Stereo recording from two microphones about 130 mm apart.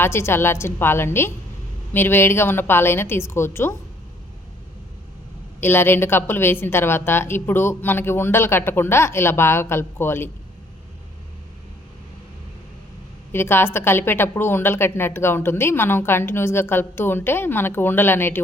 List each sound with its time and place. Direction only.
0.0 s a woman's voice: 20° left (ahead or behind)
5.5 s a woman's voice: 15° left (ahead or behind)
13.3 s a woman's voice: 20° left (ahead or behind)